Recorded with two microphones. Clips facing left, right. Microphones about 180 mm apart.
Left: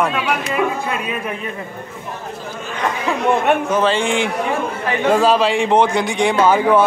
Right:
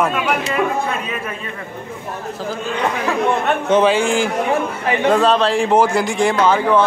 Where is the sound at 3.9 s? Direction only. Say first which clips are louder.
Right 2 dB; centre (ahead or behind).